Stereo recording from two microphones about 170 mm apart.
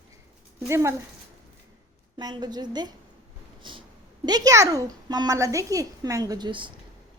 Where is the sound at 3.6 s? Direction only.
30° right (ahead or behind).